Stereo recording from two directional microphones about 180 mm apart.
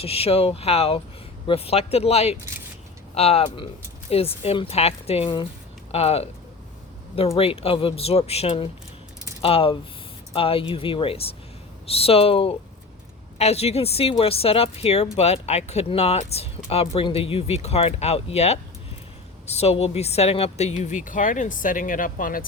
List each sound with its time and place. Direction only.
0.0 s speech: 35° left (ahead or behind)
7.3 s a woman's voice: 30° left (ahead or behind); by 22.4 s 50° left (ahead or behind)